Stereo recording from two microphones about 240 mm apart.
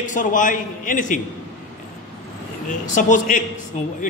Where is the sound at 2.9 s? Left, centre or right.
Left.